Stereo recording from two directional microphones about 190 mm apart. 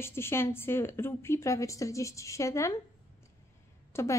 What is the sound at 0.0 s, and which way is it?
Speech, 15° left (ahead or behind).